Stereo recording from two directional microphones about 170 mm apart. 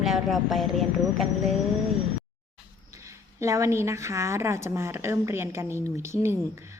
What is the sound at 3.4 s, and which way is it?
Speech, 15° right (ahead or behind).